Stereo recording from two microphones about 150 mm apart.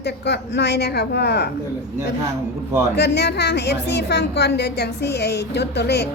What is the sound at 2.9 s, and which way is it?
A woman's voice, 90° left.